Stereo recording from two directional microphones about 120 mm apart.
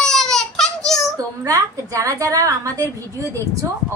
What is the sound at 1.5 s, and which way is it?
A woman's voice, 25° right (ahead or behind).